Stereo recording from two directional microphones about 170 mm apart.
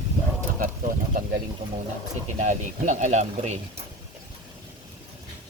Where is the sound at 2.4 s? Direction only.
45° right (ahead or behind).